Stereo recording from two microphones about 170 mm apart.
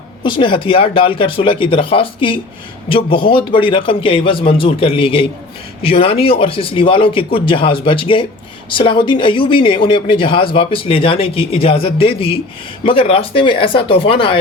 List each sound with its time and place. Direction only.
0.2 s speech: 30° left (ahead or behind)